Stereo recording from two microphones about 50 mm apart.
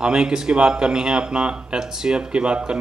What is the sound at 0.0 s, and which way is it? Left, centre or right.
Speech, centre.